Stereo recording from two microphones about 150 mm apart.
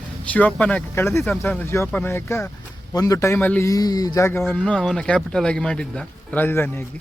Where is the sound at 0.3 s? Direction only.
10° left (ahead or behind).